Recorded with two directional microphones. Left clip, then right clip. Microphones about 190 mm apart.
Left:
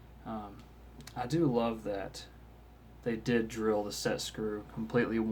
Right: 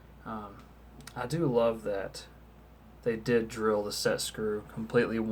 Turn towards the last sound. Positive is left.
turn(degrees=-5)  # may be behind; listen again after turning